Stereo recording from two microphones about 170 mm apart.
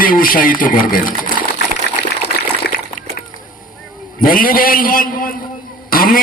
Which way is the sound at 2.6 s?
70° left (ahead or behind).